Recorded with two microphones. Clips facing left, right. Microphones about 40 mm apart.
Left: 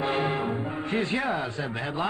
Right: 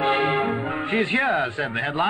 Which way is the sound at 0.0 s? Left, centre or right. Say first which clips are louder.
Right 6 dB; right.